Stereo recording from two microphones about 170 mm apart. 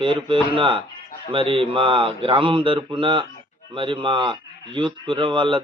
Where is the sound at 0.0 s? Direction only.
30° right (ahead or behind).